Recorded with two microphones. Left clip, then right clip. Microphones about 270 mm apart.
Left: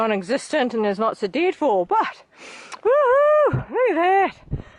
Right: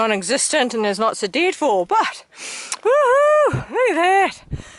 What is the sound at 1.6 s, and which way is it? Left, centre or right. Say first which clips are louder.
Speech: right 1 dB; left.